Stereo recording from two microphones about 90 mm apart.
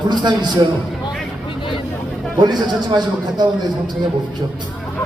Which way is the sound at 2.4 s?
55° right (ahead or behind).